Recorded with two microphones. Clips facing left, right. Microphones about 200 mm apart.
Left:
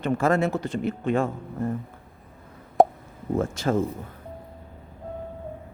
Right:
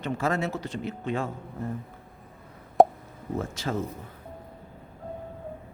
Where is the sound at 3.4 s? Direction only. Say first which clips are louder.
Left 7 dB; 50° left (ahead or behind).